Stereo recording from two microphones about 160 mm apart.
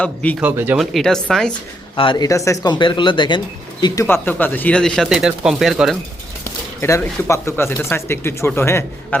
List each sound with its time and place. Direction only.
0.0 s speech: 10° left (ahead or behind)
0.3 s speech: 10° right (ahead or behind)
0.8 s speech: centre (ahead or behind)
2.0 s speech: 30° left (ahead or behind)
4.0 s speech: 10° left (ahead or behind)
6.4 s speech: 15° left (ahead or behind)